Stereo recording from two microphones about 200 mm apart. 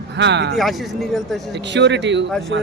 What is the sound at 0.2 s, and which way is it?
Speech, 60° right (ahead or behind).